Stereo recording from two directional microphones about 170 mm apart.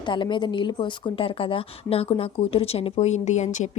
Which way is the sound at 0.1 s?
30° left (ahead or behind).